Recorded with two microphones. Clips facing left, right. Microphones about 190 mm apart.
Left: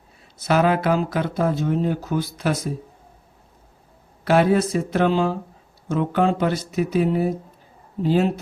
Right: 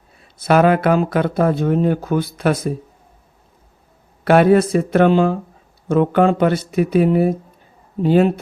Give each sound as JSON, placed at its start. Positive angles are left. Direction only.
{"t": 0.4, "sound": "speech", "side_deg": -60}
{"t": 4.2, "sound": "speech", "side_deg": -60}